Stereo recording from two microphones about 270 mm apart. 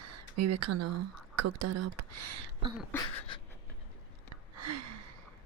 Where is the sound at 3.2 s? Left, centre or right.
Centre.